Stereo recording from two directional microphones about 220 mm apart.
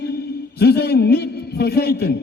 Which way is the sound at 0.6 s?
45° left (ahead or behind).